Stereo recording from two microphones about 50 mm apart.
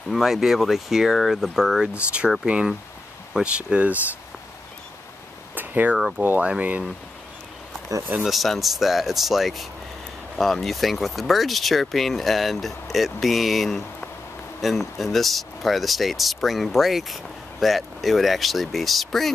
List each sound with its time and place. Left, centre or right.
0.1 s speech: centre
2.0 s speech: right
5.5 s a sound: right
8.2 s speech: centre